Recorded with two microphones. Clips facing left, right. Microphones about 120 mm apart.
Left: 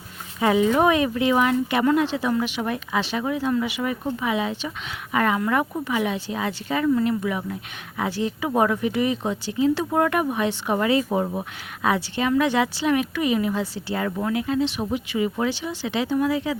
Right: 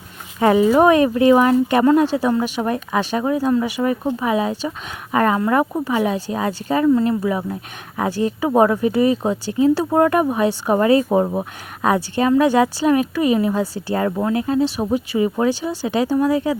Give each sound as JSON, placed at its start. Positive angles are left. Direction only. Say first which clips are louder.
{"t": 0.3, "sound": "speech", "louder": "right 5 dB", "side_deg": -50}